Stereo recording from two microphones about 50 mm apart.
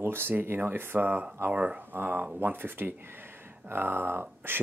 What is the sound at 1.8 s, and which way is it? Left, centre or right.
Speech, right.